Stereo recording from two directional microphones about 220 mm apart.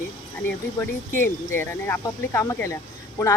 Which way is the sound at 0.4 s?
10° left (ahead or behind).